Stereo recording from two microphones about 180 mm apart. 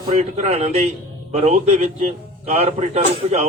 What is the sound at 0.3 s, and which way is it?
A man's voice, 40° right (ahead or behind).